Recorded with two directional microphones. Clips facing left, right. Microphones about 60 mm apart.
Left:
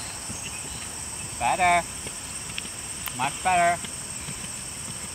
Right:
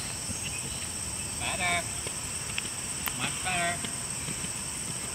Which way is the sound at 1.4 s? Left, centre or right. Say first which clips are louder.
Left 11 dB; left.